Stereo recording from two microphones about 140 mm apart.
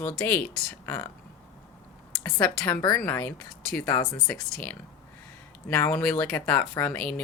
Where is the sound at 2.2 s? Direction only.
10° left (ahead or behind).